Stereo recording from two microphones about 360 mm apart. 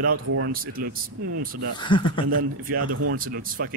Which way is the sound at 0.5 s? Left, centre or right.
Right.